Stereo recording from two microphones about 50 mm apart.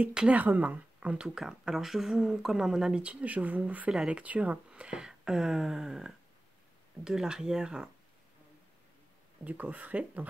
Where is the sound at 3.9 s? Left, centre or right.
Centre.